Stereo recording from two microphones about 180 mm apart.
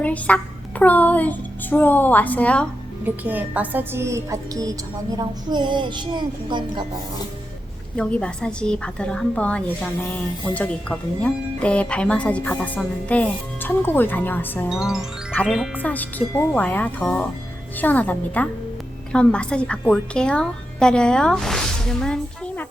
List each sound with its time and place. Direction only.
0.0 s a child's voice: 10° left (ahead or behind)
3.0 s a woman's voice: 10° right (ahead or behind); by 6.8 s 25° right (ahead or behind)
7.9 s a woman's voice: 5° left (ahead or behind)
14.7 s a woman's voice: centre (ahead or behind)